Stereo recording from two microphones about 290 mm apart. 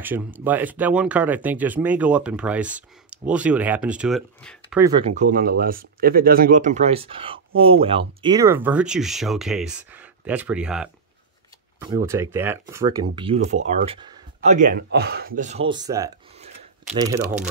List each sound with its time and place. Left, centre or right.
0.0 s speech: centre
4.7 s speech: centre